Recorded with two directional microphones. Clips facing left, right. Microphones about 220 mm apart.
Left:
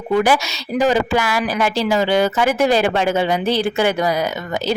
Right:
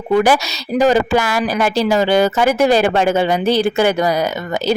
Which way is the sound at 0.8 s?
45° right (ahead or behind).